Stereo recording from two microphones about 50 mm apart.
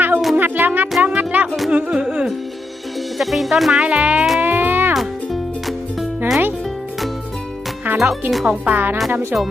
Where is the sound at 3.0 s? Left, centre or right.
Centre.